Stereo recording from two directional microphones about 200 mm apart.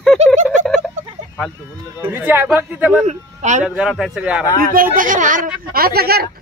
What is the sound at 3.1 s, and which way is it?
Speech, 35° right (ahead or behind).